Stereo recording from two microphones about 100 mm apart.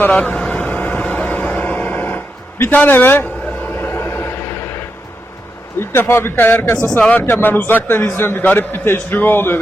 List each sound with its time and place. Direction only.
0.1 s vehicle: 10° left (ahead or behind)
5.8 s a man's voice: 25° left (ahead or behind)
6.9 s speech: 10° left (ahead or behind)
7.2 s a man's voice: 20° left (ahead or behind)